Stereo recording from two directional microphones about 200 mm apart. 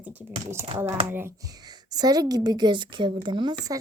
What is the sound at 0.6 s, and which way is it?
Speech, 25° right (ahead or behind).